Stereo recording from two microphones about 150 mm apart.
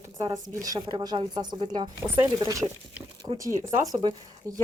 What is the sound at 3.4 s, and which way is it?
Speech, 20° right (ahead or behind).